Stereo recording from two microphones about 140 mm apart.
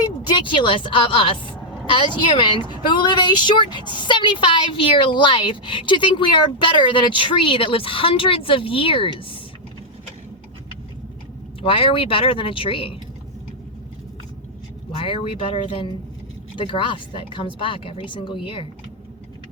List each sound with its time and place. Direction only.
0.0 s a woman's voice: 35° left (ahead or behind)
11.6 s a woman's voice: 40° left (ahead or behind)
14.9 s a woman's voice: 40° left (ahead or behind)